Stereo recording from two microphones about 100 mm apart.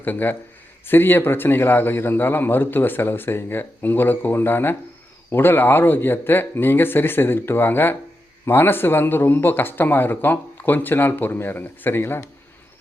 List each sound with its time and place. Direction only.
0.0 s a man's voice: 20° left (ahead or behind)